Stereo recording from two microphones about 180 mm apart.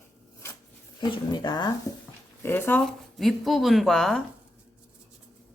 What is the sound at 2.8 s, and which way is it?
A woman's voice, centre (ahead or behind).